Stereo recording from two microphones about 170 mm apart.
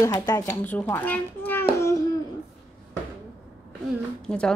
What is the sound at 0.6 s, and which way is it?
Hands, 10° left (ahead or behind).